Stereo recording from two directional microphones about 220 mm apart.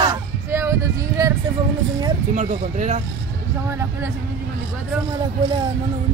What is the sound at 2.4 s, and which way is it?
Speech, 35° right (ahead or behind).